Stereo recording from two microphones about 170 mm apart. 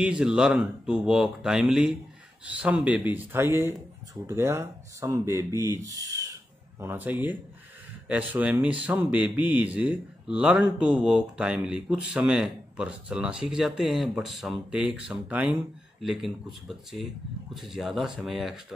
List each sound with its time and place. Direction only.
0.0 s speech: 5° right (ahead or behind)